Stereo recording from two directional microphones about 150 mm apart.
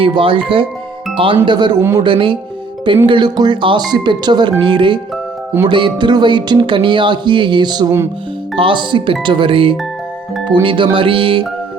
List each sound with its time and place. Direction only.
0.0 s speech: 35° right (ahead or behind); by 2.0 s 20° right (ahead or behind)
2.0 s speech: 35° right (ahead or behind)